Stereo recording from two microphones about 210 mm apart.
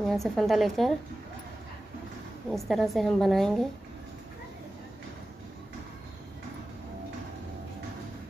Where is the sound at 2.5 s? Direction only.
Centre (ahead or behind).